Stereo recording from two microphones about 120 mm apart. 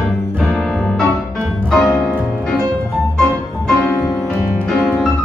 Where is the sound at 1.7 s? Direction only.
5° left (ahead or behind).